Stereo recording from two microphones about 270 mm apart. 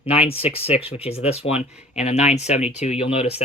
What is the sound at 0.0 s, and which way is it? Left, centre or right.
Speech, left.